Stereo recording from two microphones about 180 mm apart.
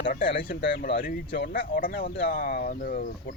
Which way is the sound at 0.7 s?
60° left (ahead or behind).